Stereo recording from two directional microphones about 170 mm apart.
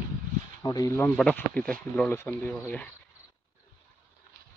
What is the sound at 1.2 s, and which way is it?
Speech, 5° left (ahead or behind).